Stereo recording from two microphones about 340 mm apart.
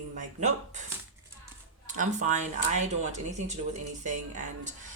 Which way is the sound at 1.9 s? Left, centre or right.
Right.